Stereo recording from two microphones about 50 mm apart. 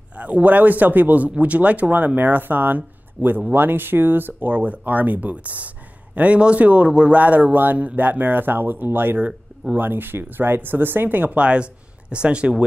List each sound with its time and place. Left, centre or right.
0.2 s a man's voice: right
11.3 s speech: right